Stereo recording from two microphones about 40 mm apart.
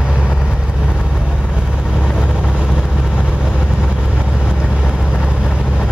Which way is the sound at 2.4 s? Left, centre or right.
Centre.